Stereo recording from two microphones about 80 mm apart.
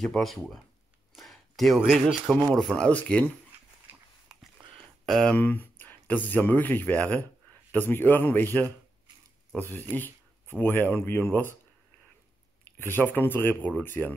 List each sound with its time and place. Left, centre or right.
0.0 s speech: centre
1.1 s a sound: centre
1.8 s speech: centre
2.5 s speech: centre
4.7 s a sound: centre
5.3 s speech: left
9.6 s speech: left
12.7 s speech: left